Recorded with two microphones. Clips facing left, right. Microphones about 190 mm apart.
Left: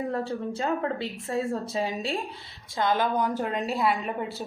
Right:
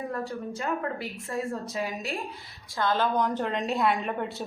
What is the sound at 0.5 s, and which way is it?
A woman's voice, 25° left (ahead or behind).